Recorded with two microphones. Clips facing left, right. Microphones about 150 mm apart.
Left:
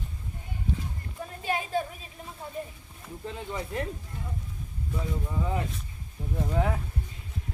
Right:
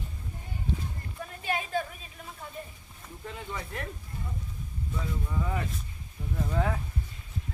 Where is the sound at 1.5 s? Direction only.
30° left (ahead or behind).